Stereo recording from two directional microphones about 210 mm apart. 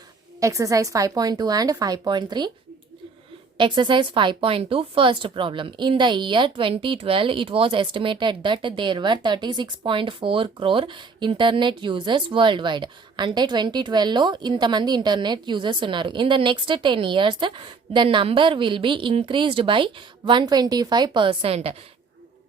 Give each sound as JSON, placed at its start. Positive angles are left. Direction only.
{"t": 0.3, "sound": "speech", "side_deg": -15}
{"t": 3.6, "sound": "speech", "side_deg": -20}